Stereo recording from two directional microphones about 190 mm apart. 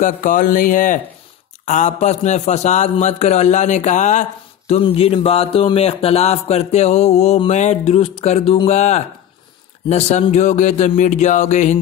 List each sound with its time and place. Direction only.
0.0 s music: 45° left (ahead or behind)
1.7 s a man's voice: 40° left (ahead or behind)